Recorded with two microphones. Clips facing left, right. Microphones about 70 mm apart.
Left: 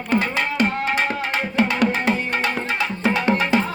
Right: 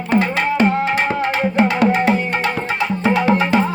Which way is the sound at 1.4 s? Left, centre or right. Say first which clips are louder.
Right 4 dB; centre.